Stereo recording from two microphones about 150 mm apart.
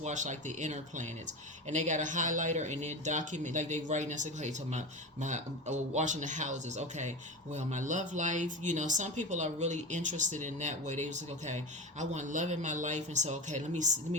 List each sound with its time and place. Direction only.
0.0 s speech: 55° right (ahead or behind)